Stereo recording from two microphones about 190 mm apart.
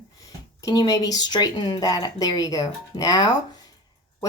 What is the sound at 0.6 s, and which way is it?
Speech, 20° left (ahead or behind).